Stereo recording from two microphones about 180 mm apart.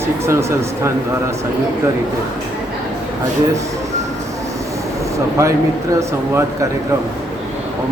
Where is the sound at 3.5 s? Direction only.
15° right (ahead or behind).